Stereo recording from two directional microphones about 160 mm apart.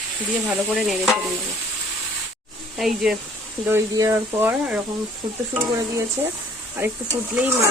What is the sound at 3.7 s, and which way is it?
Speech, 20° right (ahead or behind).